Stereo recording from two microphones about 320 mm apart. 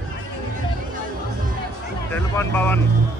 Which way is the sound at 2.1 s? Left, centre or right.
Centre.